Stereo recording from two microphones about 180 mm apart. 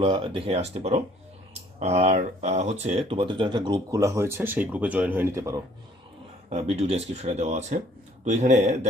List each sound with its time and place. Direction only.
0.0 s speech: 30° right (ahead or behind)
6.5 s speech: 35° right (ahead or behind)